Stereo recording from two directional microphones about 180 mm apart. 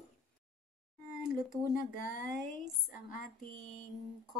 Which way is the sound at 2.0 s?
50° left (ahead or behind).